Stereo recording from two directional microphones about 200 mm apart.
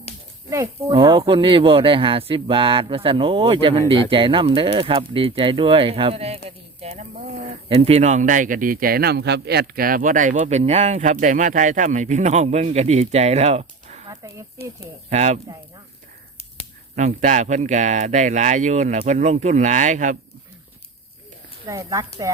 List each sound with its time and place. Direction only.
0.5 s speech: 15° right (ahead or behind); by 15.4 s 35° right (ahead or behind)
16.9 s speech: 40° right (ahead or behind)
21.7 s speech: 15° right (ahead or behind)